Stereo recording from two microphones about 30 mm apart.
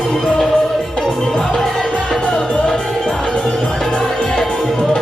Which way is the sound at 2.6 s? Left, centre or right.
Centre.